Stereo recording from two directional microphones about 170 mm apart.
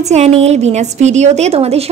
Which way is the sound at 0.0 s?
40° right (ahead or behind).